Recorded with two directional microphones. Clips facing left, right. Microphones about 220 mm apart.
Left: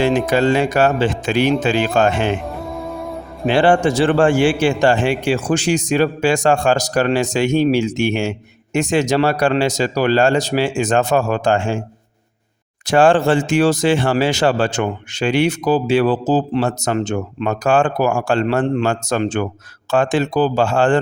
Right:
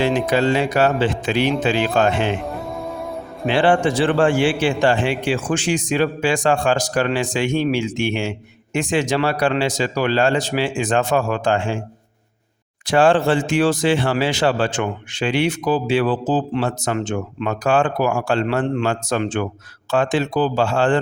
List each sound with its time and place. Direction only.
0.0 s speech: 45° left (ahead or behind)
2.5 s music: centre (ahead or behind)
3.4 s a man's voice: 45° left (ahead or behind)
12.8 s a man's voice: 45° left (ahead or behind)